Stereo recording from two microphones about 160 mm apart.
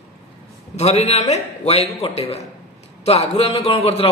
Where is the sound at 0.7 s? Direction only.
45° left (ahead or behind).